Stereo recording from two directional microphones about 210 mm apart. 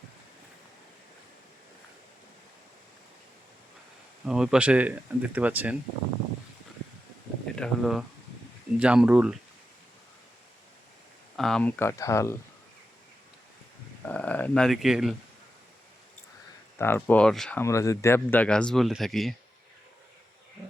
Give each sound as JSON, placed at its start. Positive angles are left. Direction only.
{"t": 4.3, "sound": "speech", "side_deg": -5}
{"t": 7.5, "sound": "speech", "side_deg": 0}
{"t": 11.3, "sound": "speech", "side_deg": 0}
{"t": 14.0, "sound": "speech", "side_deg": 5}
{"t": 16.7, "sound": "speech", "side_deg": 10}